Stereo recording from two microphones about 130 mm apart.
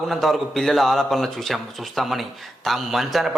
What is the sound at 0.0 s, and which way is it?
A man's voice, centre (ahead or behind).